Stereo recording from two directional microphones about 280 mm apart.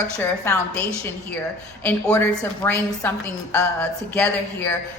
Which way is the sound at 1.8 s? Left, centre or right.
Centre.